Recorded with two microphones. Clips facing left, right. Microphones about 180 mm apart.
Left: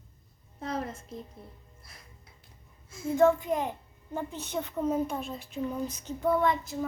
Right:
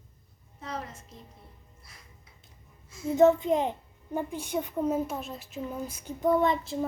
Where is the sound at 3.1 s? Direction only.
20° right (ahead or behind).